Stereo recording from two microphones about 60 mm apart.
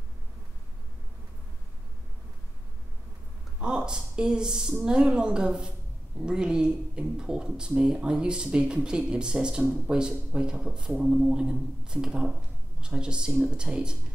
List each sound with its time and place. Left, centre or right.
3.5 s speech: centre